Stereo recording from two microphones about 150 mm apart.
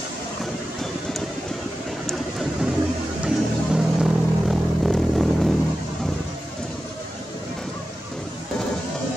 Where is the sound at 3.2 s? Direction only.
5° right (ahead or behind).